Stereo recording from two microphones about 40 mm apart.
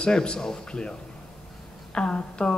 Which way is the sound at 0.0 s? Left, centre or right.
Left.